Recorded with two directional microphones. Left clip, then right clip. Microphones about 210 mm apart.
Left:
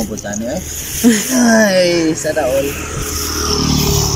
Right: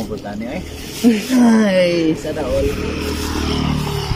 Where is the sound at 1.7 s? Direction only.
30° right (ahead or behind).